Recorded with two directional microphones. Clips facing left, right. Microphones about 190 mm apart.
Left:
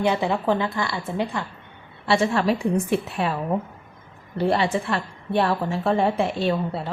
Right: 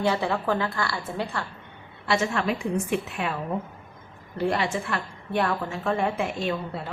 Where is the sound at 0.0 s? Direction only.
20° left (ahead or behind).